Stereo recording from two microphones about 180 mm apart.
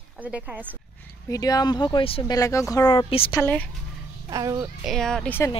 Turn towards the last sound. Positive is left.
turn(degrees=10)  # may be behind; listen again after turning